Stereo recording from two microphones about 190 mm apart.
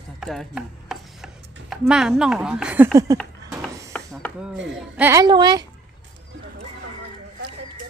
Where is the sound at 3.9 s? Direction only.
5° left (ahead or behind).